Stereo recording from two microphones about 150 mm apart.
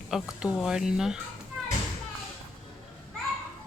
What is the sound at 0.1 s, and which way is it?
Speech, 5° right (ahead or behind).